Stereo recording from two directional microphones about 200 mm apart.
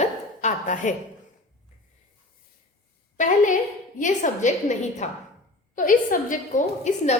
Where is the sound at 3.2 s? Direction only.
40° left (ahead or behind).